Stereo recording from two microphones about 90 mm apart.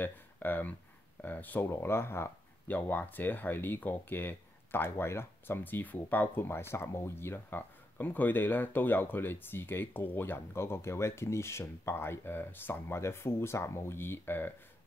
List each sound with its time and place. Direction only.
0.0 s speech: 20° left (ahead or behind)